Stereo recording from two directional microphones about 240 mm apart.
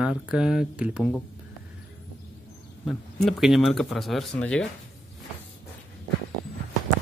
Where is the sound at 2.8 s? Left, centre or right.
Centre.